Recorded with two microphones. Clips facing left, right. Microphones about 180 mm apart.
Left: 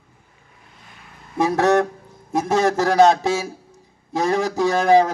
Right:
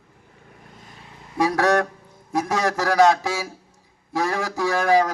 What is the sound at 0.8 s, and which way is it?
Vehicle, 40° right (ahead or behind).